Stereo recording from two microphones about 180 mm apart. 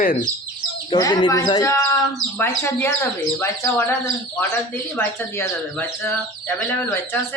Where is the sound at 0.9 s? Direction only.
25° left (ahead or behind).